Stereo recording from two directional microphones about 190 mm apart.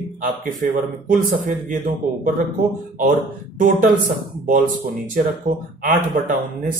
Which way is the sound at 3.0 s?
45° right (ahead or behind).